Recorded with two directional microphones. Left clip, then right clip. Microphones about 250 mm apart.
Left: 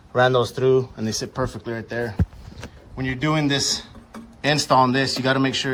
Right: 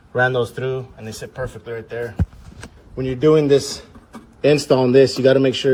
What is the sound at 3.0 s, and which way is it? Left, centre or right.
Speech, centre.